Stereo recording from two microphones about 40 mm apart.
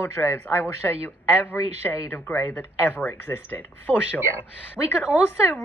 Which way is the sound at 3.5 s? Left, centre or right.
Left.